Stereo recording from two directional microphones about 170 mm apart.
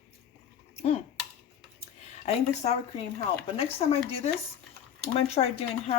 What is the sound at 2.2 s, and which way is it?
Speech, 40° left (ahead or behind).